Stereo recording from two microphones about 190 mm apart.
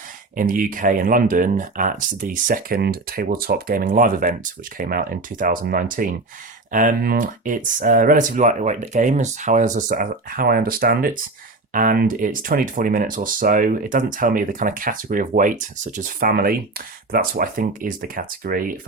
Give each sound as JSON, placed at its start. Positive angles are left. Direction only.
{"t": 0.3, "sound": "speech", "side_deg": -45}